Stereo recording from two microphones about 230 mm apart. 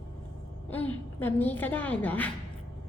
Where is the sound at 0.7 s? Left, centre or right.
Centre.